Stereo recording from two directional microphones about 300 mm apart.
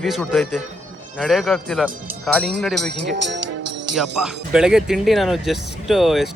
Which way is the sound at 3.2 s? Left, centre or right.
Right.